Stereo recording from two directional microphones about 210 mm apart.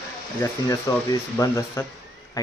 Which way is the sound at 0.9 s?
15° left (ahead or behind).